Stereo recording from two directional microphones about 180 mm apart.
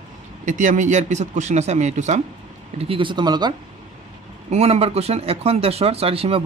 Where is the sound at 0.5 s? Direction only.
45° right (ahead or behind).